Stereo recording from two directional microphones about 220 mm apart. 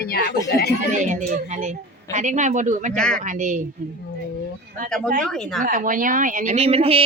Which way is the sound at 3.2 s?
35° right (ahead or behind).